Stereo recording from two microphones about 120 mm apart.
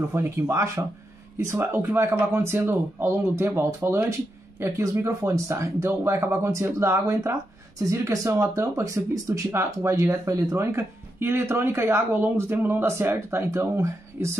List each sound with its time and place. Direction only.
0.1 s speech: 25° right (ahead or behind)